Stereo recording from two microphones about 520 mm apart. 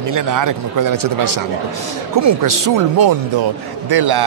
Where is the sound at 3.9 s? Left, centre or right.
Right.